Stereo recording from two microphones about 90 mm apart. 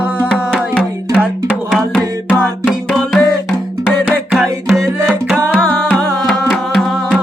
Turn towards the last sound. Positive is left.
turn(degrees=0)  # may be behind; listen again after turning